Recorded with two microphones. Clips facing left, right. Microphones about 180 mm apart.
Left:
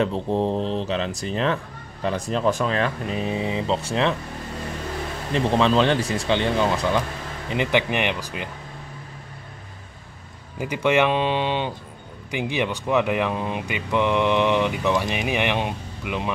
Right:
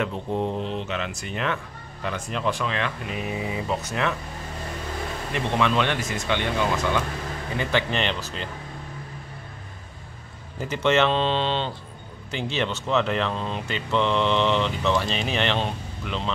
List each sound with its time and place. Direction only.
0.0 s speech: 30° left (ahead or behind)
5.3 s speech: 30° left (ahead or behind)
7.4 s speech: 20° left (ahead or behind)
10.6 s speech: 10° left (ahead or behind)